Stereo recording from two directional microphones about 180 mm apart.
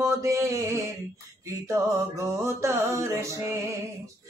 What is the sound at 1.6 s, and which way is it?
Speech, 15° right (ahead or behind).